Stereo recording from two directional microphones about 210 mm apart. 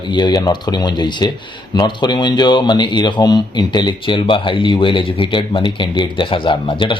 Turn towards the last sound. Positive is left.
turn(degrees=25)  # may be behind; listen again after turning